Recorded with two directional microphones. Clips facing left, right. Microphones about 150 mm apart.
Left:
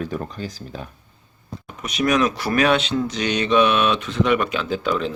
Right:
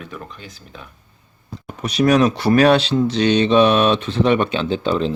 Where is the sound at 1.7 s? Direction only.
35° right (ahead or behind).